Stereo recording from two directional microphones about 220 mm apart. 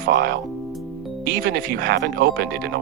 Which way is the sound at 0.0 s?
45° right (ahead or behind).